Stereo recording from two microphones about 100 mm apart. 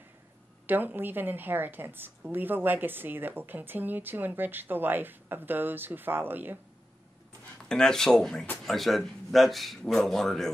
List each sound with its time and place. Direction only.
0.7 s a woman's voice: 20° right (ahead or behind)
7.6 s a man's voice: 5° left (ahead or behind)